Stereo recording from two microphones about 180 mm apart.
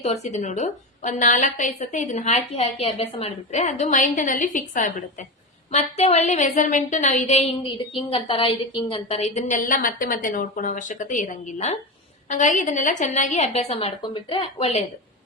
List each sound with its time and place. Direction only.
0.0 s a woman's voice: 40° left (ahead or behind)
5.7 s a woman's voice: 35° left (ahead or behind)